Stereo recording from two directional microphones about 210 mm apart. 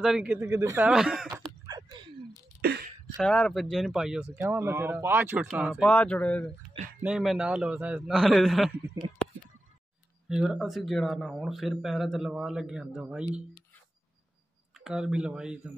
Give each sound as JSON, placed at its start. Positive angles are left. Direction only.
{"t": 0.0, "sound": "speech", "side_deg": -5}
{"t": 1.3, "sound": "a sound", "side_deg": -20}
{"t": 3.2, "sound": "speech", "side_deg": 5}
{"t": 5.9, "sound": "speech", "side_deg": 5}
{"t": 10.2, "sound": "speech", "side_deg": -5}
{"t": 14.8, "sound": "speech", "side_deg": -5}